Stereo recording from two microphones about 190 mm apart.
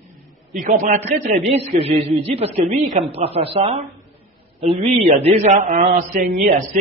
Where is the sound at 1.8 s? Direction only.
30° right (ahead or behind); by 6.8 s 45° right (ahead or behind).